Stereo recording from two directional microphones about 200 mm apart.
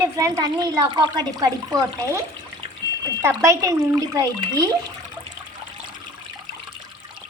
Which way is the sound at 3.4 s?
15° right (ahead or behind).